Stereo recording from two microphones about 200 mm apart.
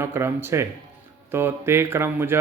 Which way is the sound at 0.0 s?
15° right (ahead or behind).